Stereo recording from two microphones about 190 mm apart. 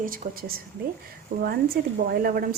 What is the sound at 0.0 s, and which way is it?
A woman's voice, 45° right (ahead or behind).